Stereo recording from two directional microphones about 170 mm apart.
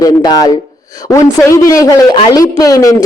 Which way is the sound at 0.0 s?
20° left (ahead or behind).